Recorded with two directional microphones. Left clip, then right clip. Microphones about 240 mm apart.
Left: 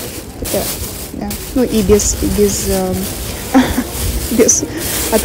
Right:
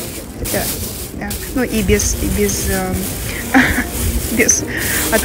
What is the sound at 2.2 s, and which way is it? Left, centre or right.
Speech, centre.